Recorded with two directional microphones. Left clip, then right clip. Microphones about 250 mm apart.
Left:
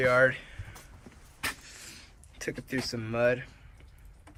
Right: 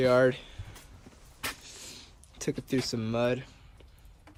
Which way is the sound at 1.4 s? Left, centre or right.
Centre.